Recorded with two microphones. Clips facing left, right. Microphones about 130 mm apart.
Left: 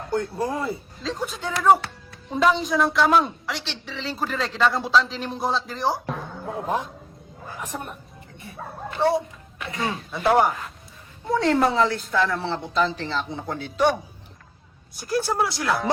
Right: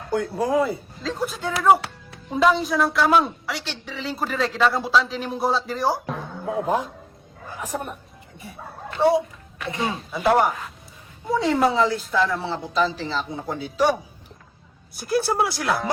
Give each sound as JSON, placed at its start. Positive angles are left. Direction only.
{"t": 0.3, "sound": "a woman's voice", "side_deg": 0}
{"t": 9.0, "sound": "music", "side_deg": 0}
{"t": 10.1, "sound": "a woman's voice", "side_deg": 0}
{"t": 15.4, "sound": "a woman's voice", "side_deg": 0}